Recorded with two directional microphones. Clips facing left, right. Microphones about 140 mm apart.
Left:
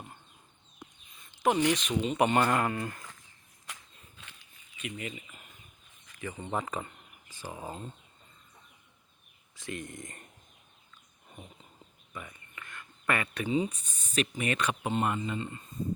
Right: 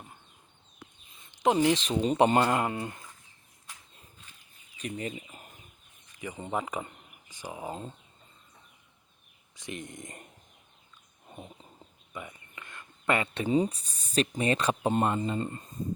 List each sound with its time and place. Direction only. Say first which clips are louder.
1.1 s speech: right 2 dB; 25° right (ahead or behind)
3.7 s a sound: left 3 dB; 70° left (ahead or behind)
4.8 s speech: right 4 dB; 40° right (ahead or behind)
6.1 s speech: right 1 dB; 15° right (ahead or behind)
9.6 s speech: even; 20° right (ahead or behind)
11.3 s bird: right 4 dB; 25° right (ahead or behind)
12.1 s a sound: right 3 dB; 20° right (ahead or behind)
13.5 s speech: right 4 dB; 35° right (ahead or behind)